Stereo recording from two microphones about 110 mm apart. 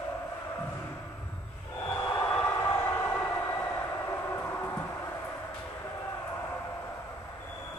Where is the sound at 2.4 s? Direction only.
25° left (ahead or behind).